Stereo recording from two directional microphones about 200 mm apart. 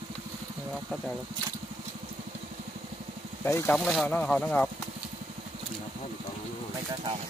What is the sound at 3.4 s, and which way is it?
Speech, 10° left (ahead or behind).